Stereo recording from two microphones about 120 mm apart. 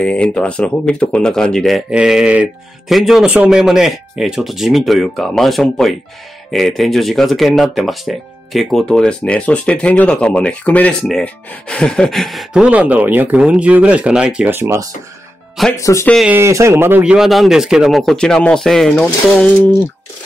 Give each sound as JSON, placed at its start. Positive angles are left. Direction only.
{"t": 0.0, "sound": "speech", "side_deg": 10}
{"t": 12.6, "sound": "speech", "side_deg": -15}
{"t": 15.8, "sound": "speech", "side_deg": 25}
{"t": 16.3, "sound": "speech", "side_deg": -20}
{"t": 17.0, "sound": "speech", "side_deg": -5}